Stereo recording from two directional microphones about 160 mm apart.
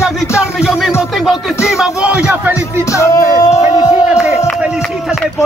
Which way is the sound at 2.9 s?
20° left (ahead or behind).